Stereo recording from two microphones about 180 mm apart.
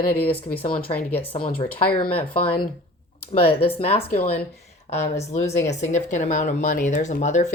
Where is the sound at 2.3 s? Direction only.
30° left (ahead or behind).